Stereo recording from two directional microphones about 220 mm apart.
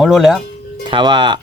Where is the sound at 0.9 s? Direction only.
20° right (ahead or behind).